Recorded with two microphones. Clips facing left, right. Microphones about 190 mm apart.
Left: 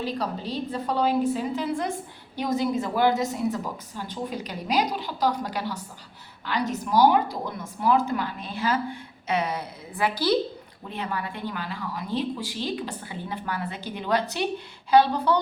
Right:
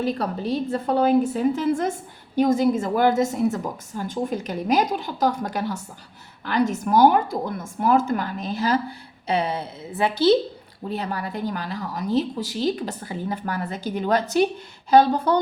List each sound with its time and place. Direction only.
0.0 s a woman's voice: 50° right (ahead or behind); by 10.3 s 25° right (ahead or behind)
10.8 s a woman's voice: 40° right (ahead or behind)